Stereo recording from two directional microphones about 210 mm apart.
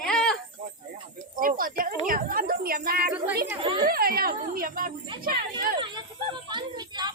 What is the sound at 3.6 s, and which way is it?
Speech, 25° right (ahead or behind).